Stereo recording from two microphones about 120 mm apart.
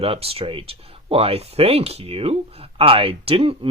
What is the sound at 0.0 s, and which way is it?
Speech, 50° right (ahead or behind).